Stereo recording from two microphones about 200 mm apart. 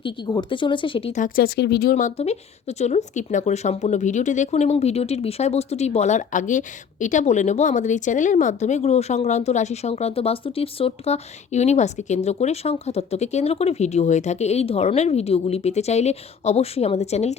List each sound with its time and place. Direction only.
0.0 s speech: 25° left (ahead or behind); by 1.5 s 40° left (ahead or behind)
1.5 s speech: 60° left (ahead or behind); by 17.3 s 35° left (ahead or behind)